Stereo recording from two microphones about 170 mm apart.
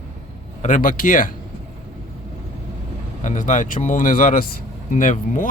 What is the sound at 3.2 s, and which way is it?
Speech, 45° left (ahead or behind).